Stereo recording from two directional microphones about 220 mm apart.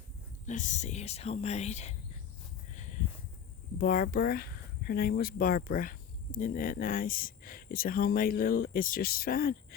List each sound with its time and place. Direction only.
0.4 s speech: 35° left (ahead or behind)
2.7 s a sound: 35° left (ahead or behind)
3.8 s speech: 40° left (ahead or behind)